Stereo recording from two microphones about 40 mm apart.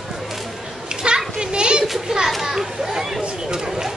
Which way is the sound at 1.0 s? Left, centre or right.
Right.